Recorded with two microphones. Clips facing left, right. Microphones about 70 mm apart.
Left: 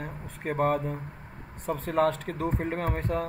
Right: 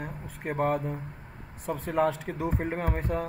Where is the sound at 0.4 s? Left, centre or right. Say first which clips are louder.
Left 1 dB; left.